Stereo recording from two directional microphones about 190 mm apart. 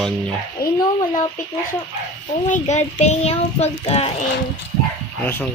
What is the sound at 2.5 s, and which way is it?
A child's voice, 35° left (ahead or behind).